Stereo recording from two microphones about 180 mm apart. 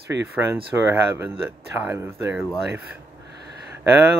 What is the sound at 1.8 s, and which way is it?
Speech, 15° right (ahead or behind).